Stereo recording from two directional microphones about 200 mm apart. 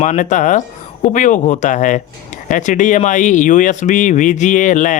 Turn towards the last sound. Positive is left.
turn(degrees=40)  # may be behind; listen again after turning